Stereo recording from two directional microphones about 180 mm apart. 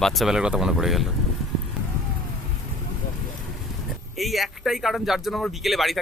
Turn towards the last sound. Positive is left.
turn(degrees=0)  # may be behind; listen again after turning